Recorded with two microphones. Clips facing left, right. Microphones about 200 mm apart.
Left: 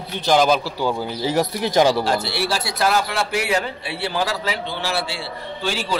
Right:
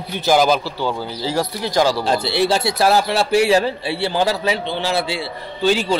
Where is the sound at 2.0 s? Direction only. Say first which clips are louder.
Right 4 dB; 20° right (ahead or behind).